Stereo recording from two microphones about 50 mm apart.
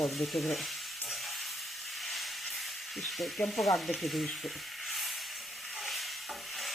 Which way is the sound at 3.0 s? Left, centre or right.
Centre.